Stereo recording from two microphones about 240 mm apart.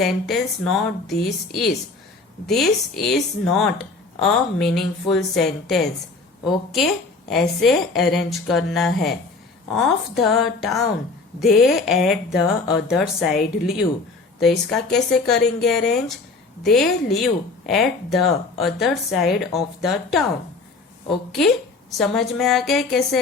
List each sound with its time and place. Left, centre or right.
0.0 s speech: centre
15.4 s a woman's voice: left
15.6 s speech: centre
21.3 s speech: centre